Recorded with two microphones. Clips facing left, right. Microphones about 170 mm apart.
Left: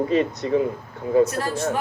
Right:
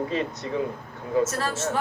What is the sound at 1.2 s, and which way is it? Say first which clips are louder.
Speech: left 3 dB; 15° left (ahead or behind).